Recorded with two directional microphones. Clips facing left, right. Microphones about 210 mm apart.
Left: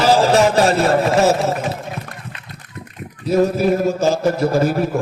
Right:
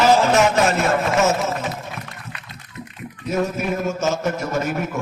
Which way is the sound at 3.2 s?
35° left (ahead or behind).